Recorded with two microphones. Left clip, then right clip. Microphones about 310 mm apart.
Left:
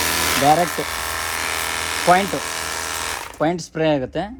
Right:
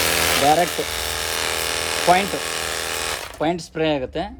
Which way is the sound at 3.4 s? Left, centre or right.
Centre.